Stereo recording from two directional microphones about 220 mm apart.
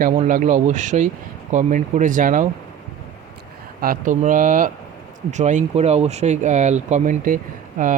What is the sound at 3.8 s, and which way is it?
Speech, 40° right (ahead or behind).